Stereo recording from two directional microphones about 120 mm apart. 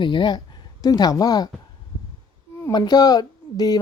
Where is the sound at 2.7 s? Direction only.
35° left (ahead or behind).